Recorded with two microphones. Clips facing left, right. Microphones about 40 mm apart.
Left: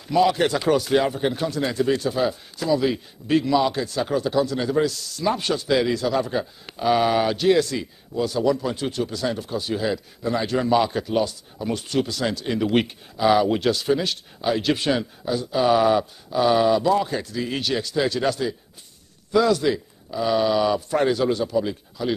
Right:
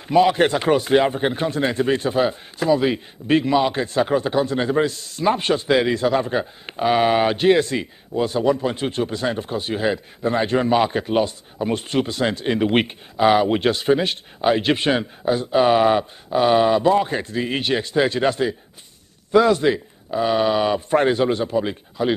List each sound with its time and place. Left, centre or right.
0.1 s a man's voice: right